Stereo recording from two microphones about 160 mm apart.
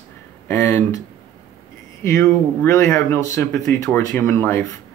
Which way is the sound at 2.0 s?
20° left (ahead or behind).